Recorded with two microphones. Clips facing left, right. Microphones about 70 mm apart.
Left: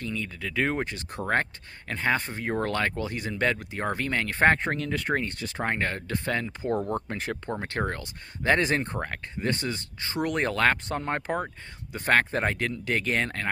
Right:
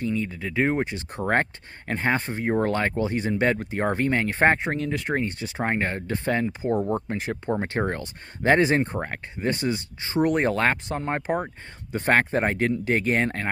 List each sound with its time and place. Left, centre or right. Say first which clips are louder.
0.0 s speech: right 6 dB; right
4.6 s speech: right 2 dB; centre
5.1 s speech: right 2 dB; centre
6.6 s speech: right 3 dB; centre
7.4 s speech: right 6 dB; right
10.9 s speech: right 3 dB; centre
11.9 s speech: right 2 dB; right